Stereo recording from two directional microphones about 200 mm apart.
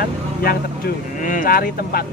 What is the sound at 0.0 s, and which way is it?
Speech, 50° left (ahead or behind).